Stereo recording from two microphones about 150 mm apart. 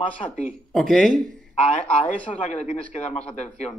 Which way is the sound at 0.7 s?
5° left (ahead or behind).